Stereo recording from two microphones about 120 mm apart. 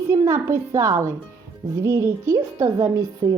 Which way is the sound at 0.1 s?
25° right (ahead or behind).